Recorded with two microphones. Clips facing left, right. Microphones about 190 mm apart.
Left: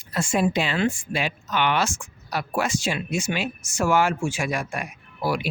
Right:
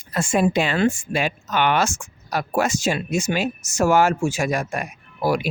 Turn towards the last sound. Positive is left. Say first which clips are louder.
# right 4 dB
turn(degrees=-45)  # may be behind; listen again after turning